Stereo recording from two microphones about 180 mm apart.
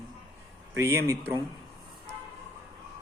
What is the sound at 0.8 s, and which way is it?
Speech, 15° right (ahead or behind).